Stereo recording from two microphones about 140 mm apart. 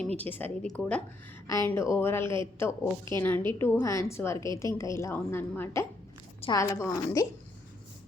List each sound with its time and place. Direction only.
0.2 s a woman's voice: 15° left (ahead or behind)
1.6 s a woman's voice: 20° left (ahead or behind)